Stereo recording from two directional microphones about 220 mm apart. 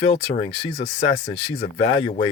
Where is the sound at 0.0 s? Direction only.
30° left (ahead or behind).